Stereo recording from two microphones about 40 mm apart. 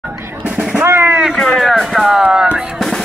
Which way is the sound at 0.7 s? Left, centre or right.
Right.